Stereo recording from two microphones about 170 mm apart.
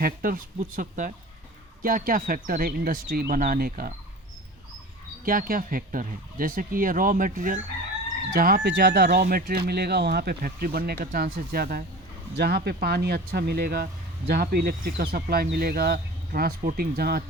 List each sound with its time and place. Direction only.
0.0 s speech: 55° right (ahead or behind)
5.2 s speech: 55° right (ahead or behind)